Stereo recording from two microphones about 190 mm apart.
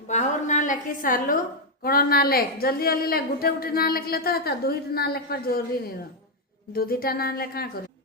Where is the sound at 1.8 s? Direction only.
50° left (ahead or behind).